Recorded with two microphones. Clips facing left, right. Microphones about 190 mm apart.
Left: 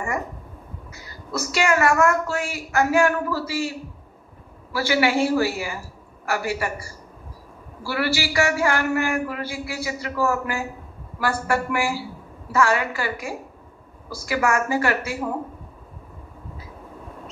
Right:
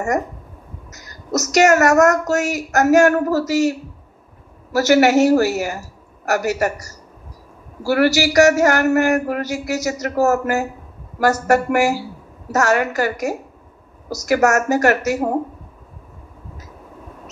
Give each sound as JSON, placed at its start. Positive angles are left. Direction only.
{"t": 0.9, "sound": "a man's voice", "side_deg": -40}
{"t": 4.7, "sound": "a man's voice", "side_deg": -45}